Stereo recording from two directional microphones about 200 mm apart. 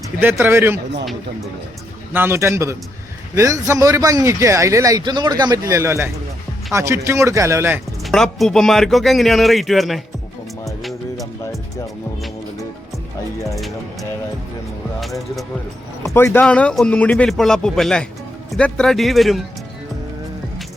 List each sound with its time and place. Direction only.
0.2 s speech: 10° right (ahead or behind)
2.1 s speech: 10° right (ahead or behind)
8.0 s a man's voice: centre (ahead or behind)
16.0 s a man's voice: 10° left (ahead or behind)